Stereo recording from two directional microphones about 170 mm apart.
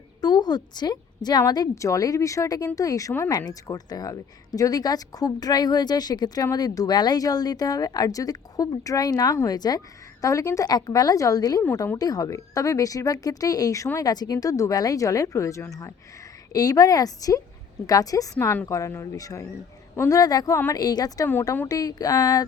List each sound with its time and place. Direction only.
0.2 s a woman's voice: 25° left (ahead or behind)